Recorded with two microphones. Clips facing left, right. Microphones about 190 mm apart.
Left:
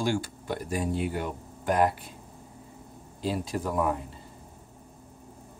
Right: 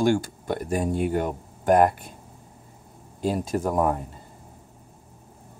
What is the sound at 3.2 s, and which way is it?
Speech, 45° right (ahead or behind).